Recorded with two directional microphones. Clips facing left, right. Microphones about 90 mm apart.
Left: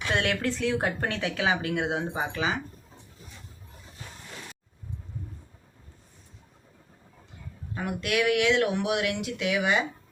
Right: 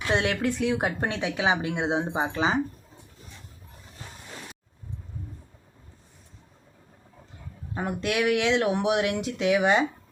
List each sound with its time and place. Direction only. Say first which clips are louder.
0.1 s speech: right 2 dB; 15° right (ahead or behind)
7.7 s speech: right 1 dB; 30° right (ahead or behind)